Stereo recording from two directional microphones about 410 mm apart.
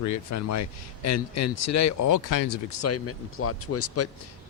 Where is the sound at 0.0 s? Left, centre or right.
Left.